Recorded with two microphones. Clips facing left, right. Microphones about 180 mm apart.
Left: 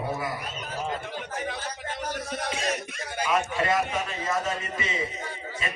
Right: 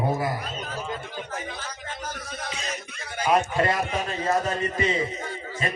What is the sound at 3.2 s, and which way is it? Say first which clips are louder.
A man's voice: right 4 dB; 35° right (ahead or behind).